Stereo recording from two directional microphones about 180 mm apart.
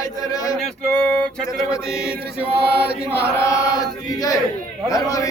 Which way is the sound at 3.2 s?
20° left (ahead or behind).